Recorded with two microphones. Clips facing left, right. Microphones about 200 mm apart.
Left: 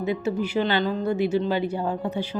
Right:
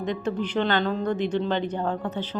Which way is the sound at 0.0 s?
5° left (ahead or behind).